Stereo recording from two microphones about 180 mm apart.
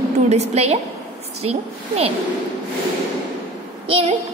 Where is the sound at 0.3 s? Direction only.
35° right (ahead or behind).